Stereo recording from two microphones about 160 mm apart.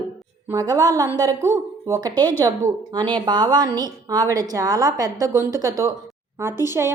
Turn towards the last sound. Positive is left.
turn(degrees=-15)  # may be behind; listen again after turning